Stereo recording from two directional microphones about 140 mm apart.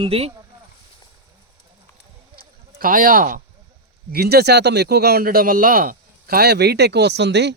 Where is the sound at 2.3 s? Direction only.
85° right.